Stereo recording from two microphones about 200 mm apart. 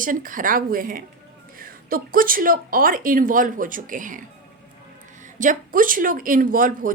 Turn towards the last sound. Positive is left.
turn(degrees=-45)  # may be behind; listen again after turning